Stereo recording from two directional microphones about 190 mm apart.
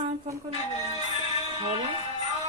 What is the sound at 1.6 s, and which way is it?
Speech, 30° right (ahead or behind).